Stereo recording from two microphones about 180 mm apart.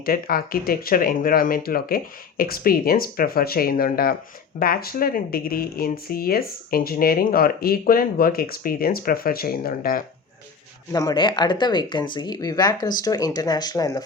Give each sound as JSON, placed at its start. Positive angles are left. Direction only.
{"t": 0.0, "sound": "speech", "side_deg": 55}
{"t": 10.9, "sound": "speech", "side_deg": 25}